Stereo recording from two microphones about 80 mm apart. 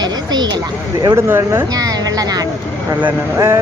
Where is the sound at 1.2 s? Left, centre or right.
Right.